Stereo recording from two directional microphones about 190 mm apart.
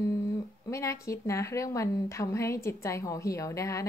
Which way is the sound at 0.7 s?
15° left (ahead or behind).